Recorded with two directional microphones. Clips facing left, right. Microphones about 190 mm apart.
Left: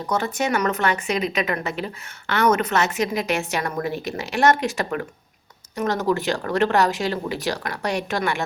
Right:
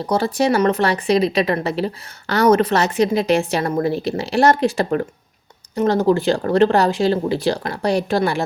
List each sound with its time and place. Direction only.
0.0 s speech: 35° right (ahead or behind)